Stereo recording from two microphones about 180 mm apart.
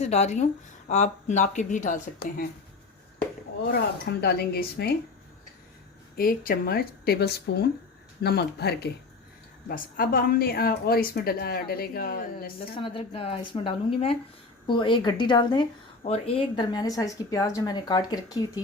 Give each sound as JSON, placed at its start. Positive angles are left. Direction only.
{"t": 0.0, "sound": "speech", "side_deg": 35}
{"t": 3.7, "sound": "a woman's voice", "side_deg": 65}
{"t": 6.1, "sound": "a woman's voice", "side_deg": 55}
{"t": 9.6, "sound": "a woman's voice", "side_deg": 50}
{"t": 12.5, "sound": "speech", "side_deg": 30}